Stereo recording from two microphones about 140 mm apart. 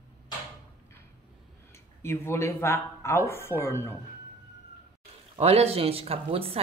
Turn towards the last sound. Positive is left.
turn(degrees=-45)  # may be behind; listen again after turning